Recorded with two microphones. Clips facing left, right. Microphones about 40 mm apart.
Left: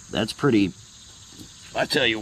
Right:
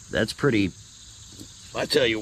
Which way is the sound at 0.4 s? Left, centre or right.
Centre.